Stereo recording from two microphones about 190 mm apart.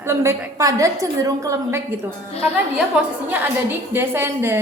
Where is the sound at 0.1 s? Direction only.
15° right (ahead or behind).